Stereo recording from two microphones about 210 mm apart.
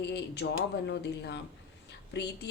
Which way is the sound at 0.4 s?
55° left (ahead or behind).